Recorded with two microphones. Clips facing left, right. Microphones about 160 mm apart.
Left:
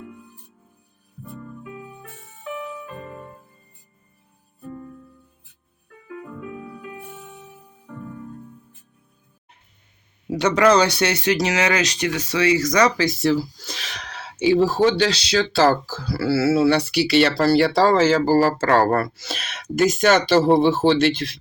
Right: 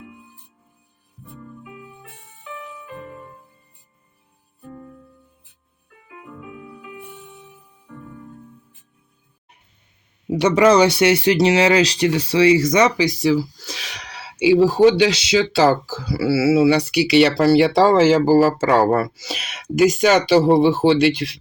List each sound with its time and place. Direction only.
10.2 s speech: 20° right (ahead or behind)